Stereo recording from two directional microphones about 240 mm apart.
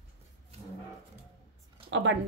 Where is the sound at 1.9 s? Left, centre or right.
Right.